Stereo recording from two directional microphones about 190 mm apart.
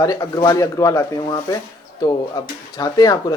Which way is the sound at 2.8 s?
20° left (ahead or behind).